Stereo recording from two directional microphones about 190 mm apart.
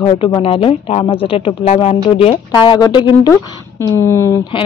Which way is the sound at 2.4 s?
20° left (ahead or behind).